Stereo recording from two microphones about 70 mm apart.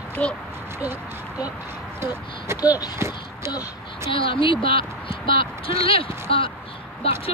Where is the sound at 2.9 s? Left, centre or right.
Right.